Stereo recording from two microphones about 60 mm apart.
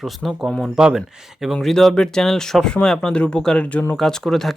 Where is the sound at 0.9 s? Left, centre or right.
Centre; by 3.8 s left.